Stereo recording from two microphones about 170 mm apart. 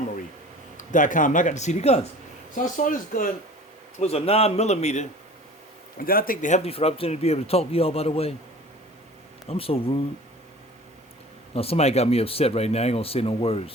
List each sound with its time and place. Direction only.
0.8 s speech: 50° left (ahead or behind)
2.6 s speech: 50° left (ahead or behind)
4.0 s speech: 35° left (ahead or behind)
6.0 s speech: 60° left (ahead or behind); by 8.4 s 35° left (ahead or behind)
9.5 s speech: 35° left (ahead or behind)
11.5 s speech: 35° left (ahead or behind)